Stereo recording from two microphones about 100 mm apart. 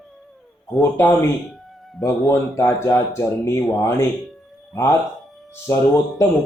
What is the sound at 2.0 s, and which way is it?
A man's voice, 25° left (ahead or behind).